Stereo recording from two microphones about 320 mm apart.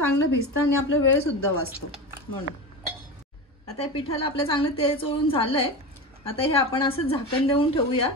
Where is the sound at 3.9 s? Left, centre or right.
Centre.